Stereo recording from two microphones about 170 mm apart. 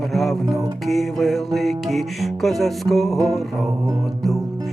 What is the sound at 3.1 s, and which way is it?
Music, 20° right (ahead or behind).